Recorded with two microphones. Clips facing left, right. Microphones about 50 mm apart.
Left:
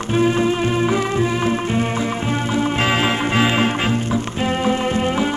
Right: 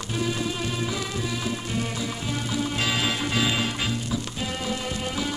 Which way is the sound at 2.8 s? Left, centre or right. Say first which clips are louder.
Left 8 dB; left.